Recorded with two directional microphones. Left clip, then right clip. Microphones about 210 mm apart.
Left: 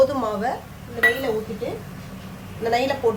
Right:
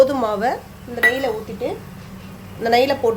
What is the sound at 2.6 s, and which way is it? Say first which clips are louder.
Speech: right 5 dB; 40° right (ahead or behind).